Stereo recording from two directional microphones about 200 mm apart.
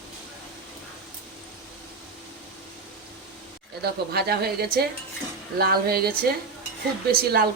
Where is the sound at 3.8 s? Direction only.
50° right (ahead or behind).